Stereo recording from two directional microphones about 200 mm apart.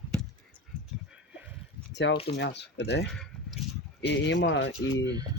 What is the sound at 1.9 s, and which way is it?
Speech, 65° left (ahead or behind).